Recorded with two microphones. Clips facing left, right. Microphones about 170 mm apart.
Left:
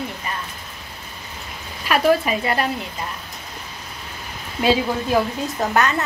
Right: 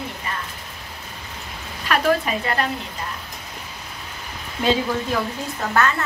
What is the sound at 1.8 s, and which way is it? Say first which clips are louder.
Speech: left 3 dB; 10° left (ahead or behind).